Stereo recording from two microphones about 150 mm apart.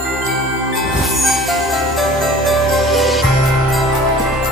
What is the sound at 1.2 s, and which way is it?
Music, centre (ahead or behind).